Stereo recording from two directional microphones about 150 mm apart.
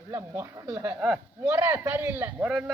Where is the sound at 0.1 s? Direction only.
15° right (ahead or behind).